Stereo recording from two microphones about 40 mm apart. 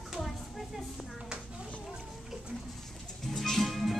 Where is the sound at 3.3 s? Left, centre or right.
Centre.